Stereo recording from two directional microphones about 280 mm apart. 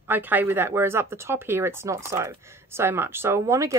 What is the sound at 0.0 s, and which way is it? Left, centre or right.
Speech, centre.